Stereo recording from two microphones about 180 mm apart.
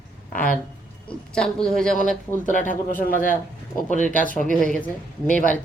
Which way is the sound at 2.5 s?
45° left (ahead or behind).